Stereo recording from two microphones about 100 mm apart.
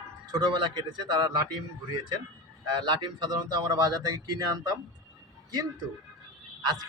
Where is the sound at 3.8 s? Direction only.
40° right (ahead or behind).